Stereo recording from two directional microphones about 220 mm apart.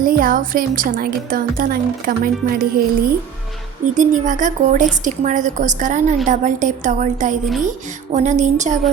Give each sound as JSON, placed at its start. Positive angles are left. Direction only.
{"t": 0.0, "sound": "a woman's voice", "side_deg": -40}
{"t": 3.9, "sound": "a woman's voice", "side_deg": -35}